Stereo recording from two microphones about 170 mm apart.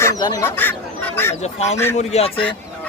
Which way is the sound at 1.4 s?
40° left (ahead or behind).